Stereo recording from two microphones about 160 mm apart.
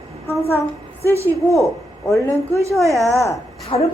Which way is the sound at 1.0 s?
15° right (ahead or behind).